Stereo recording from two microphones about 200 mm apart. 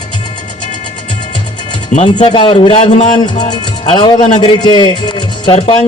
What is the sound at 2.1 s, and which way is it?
Speech, 25° left (ahead or behind).